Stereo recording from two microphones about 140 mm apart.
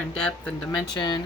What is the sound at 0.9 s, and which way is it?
Speech, 30° left (ahead or behind).